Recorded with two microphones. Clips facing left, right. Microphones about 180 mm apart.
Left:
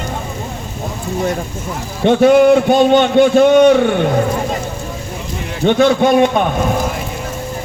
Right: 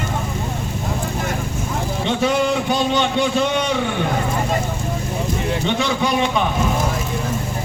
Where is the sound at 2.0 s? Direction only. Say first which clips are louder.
Left 11 dB; 55° left (ahead or behind).